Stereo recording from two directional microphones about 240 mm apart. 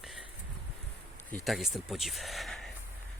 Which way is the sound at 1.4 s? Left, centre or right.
Centre.